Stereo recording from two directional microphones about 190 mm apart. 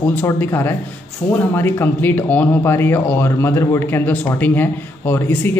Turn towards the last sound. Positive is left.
turn(degrees=10)  # may be behind; listen again after turning